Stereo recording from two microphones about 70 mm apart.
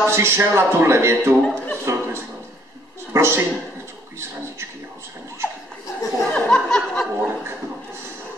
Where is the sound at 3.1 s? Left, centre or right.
Right.